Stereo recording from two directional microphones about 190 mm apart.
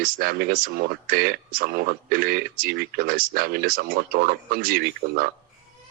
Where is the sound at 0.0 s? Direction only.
50° right (ahead or behind).